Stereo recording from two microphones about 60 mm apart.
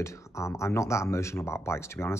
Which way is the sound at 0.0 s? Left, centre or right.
Left.